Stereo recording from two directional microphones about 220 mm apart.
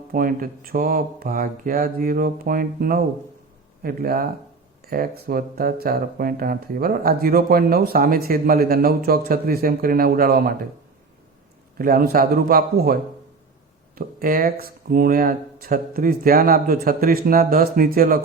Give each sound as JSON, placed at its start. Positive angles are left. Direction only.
{"t": 0.1, "sound": "speech", "side_deg": -40}
{"t": 11.8, "sound": "speech", "side_deg": -40}